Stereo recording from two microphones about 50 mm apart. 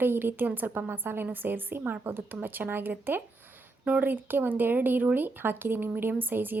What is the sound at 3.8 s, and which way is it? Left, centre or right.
A woman's voice, right.